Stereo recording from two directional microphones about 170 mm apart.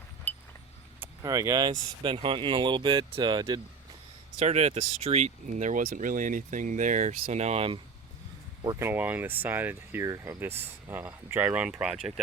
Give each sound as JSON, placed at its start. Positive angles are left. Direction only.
{"t": 0.3, "sound": "a sound", "side_deg": 10}
{"t": 1.2, "sound": "speech", "side_deg": -20}
{"t": 4.4, "sound": "speech", "side_deg": -40}
{"t": 8.6, "sound": "speech", "side_deg": -20}